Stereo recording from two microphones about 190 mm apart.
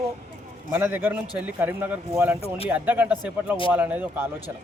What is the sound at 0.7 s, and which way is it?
Speech, 10° right (ahead or behind).